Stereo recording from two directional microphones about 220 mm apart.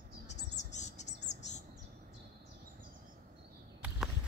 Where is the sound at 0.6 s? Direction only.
30° left (ahead or behind).